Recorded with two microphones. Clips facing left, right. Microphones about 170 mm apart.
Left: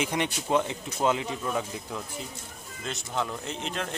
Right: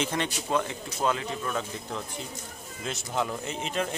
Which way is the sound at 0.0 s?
15° left (ahead or behind).